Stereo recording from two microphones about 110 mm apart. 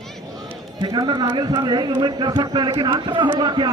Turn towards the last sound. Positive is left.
turn(degrees=-40)  # may be behind; listen again after turning